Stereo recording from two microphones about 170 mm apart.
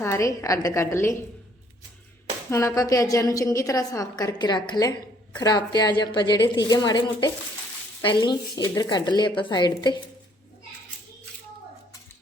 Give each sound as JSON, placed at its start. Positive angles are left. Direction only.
{"t": 0.0, "sound": "a woman's voice", "side_deg": 20}
{"t": 2.5, "sound": "a woman's voice", "side_deg": 20}